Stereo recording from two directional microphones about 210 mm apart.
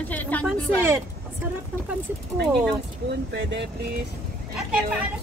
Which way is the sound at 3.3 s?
55° right (ahead or behind).